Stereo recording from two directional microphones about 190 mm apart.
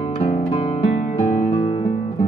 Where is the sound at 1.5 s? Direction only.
25° left (ahead or behind).